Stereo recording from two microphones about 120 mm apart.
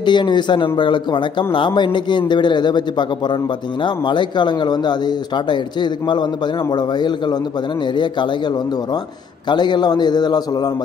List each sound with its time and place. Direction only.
0.0 s speech: 40° left (ahead or behind)
9.5 s speech: 40° left (ahead or behind)